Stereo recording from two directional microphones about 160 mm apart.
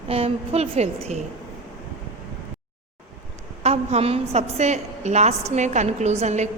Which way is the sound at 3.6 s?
40° right (ahead or behind).